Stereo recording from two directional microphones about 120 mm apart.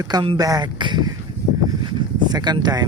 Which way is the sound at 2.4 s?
35° right (ahead or behind).